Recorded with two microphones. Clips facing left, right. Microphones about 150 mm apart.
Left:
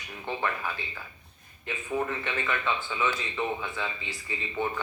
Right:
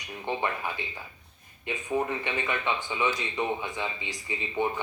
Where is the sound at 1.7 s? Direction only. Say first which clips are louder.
Right 2 dB; 20° right (ahead or behind).